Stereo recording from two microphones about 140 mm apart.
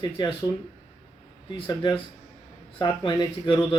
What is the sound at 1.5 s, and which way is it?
Speech, 35° left (ahead or behind).